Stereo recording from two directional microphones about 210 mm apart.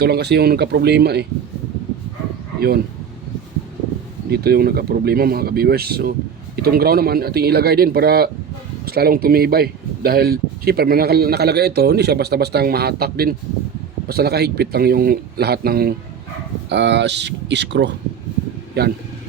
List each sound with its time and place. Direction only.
0.0 s speech: 50° right (ahead or behind)
2.6 s speech: 45° right (ahead or behind)
4.3 s speech: 50° right (ahead or behind)